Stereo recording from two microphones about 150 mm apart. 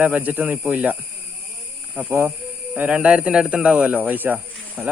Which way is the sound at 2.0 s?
15° right (ahead or behind).